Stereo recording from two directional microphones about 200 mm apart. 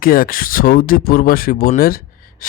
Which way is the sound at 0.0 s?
45° left (ahead or behind).